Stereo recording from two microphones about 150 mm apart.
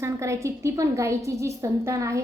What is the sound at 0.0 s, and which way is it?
A woman's voice, 20° right (ahead or behind).